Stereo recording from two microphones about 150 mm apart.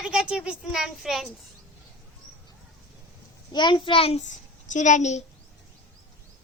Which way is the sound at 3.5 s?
30° left (ahead or behind).